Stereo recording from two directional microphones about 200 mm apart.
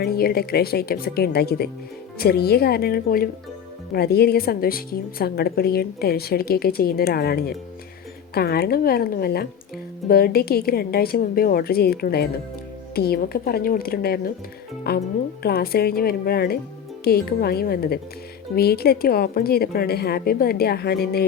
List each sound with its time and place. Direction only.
0.0 s a woman's voice: 50° left (ahead or behind)